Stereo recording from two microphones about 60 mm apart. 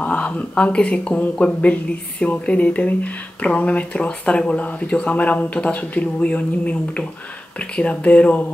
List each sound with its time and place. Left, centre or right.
0.0 s speech: left